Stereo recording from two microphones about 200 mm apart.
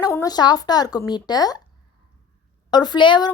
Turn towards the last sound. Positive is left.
turn(degrees=20)  # may be behind; listen again after turning